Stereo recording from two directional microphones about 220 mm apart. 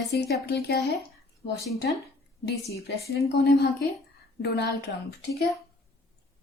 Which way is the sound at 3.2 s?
50° left (ahead or behind).